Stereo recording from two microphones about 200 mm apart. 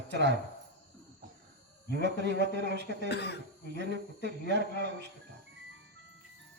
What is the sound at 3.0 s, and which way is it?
Speech, 55° left (ahead or behind).